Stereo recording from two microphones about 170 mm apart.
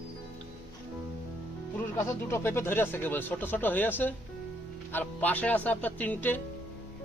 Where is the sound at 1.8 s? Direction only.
15° left (ahead or behind).